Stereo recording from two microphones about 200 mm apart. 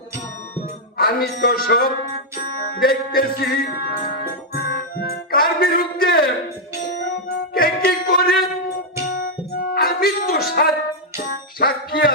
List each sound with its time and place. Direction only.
0.9 s speech: 45° left (ahead or behind)
2.7 s music: 45° left (ahead or behind)
7.3 s music: 50° left (ahead or behind)